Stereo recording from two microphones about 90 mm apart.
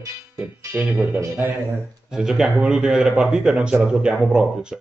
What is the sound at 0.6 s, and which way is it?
Speech, 25° right (ahead or behind).